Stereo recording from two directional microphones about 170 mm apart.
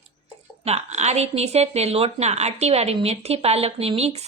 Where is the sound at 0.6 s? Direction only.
40° right (ahead or behind).